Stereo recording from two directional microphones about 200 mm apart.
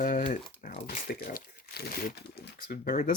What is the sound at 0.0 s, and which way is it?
Speech, 40° left (ahead or behind).